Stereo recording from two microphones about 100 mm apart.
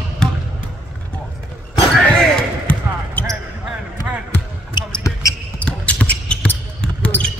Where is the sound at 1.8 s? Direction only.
5° left (ahead or behind).